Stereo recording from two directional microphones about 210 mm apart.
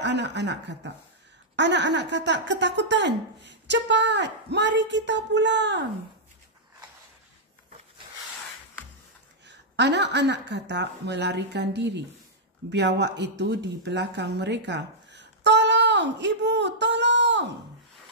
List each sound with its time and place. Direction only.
0.0 s speech: 55° right (ahead or behind)
9.5 s speech: 55° right (ahead or behind)